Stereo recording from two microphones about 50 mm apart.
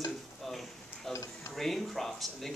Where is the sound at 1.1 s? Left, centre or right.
Left.